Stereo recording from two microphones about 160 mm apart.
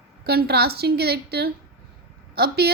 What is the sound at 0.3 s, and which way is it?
A woman's voice, 85° right.